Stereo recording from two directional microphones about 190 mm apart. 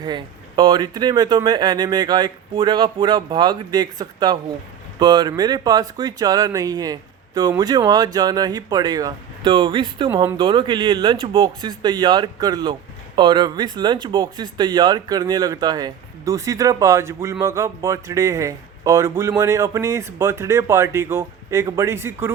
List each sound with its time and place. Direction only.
0.0 s speech: 25° right (ahead or behind)
10.1 s speech: 15° right (ahead or behind)
10.3 s speech: 25° right (ahead or behind)